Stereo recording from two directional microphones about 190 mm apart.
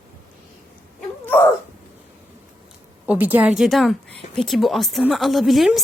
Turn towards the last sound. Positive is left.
turn(degrees=0)  # may be behind; listen again after turning